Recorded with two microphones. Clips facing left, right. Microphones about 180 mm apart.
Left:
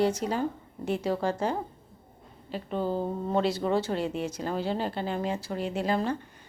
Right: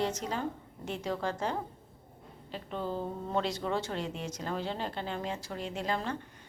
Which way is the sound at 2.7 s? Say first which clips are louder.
Left 6 dB; 35° left (ahead or behind).